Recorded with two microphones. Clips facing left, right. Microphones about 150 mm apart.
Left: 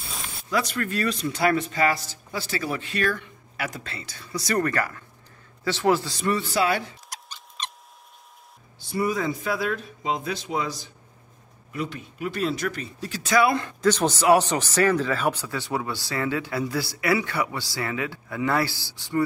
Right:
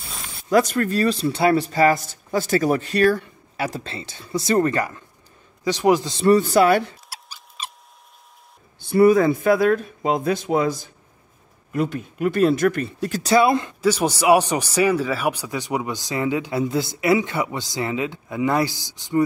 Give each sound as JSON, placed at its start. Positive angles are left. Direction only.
{"t": 0.5, "sound": "speech", "side_deg": -45}
{"t": 6.2, "sound": "speech", "side_deg": -45}
{"t": 7.1, "sound": "mouse", "side_deg": -5}
{"t": 8.7, "sound": "speech", "side_deg": -55}
{"t": 13.2, "sound": "speech", "side_deg": -30}
{"t": 13.7, "sound": "speech", "side_deg": -10}